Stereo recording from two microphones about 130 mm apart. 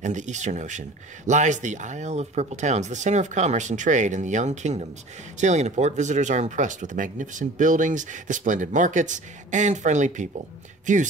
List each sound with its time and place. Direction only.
0.0 s speech: 70° right (ahead or behind)